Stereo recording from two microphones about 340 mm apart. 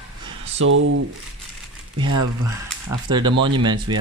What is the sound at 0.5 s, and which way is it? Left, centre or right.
Speech, right.